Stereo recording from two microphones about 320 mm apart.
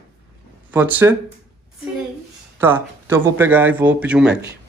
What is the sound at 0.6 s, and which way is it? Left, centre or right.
Speech, centre.